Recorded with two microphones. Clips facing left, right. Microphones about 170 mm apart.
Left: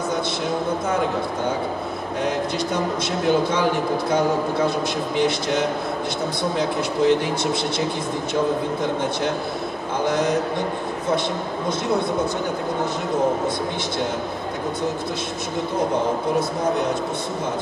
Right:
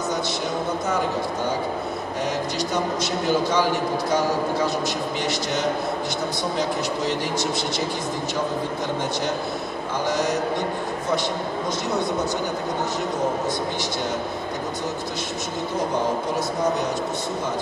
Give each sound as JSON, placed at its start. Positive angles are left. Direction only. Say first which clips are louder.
{"t": 3.3, "sound": "a man's voice", "louder": "left 2 dB", "side_deg": 60}
{"t": 10.0, "sound": "a man's voice", "louder": "left 3 dB", "side_deg": 60}